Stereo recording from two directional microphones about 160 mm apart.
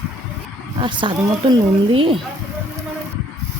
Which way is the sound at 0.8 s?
30° right (ahead or behind).